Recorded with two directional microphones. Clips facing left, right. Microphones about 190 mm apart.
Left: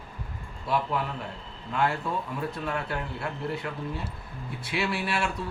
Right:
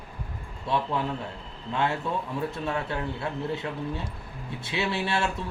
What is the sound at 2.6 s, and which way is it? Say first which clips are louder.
Speech: right 2 dB; 25° right (ahead or behind).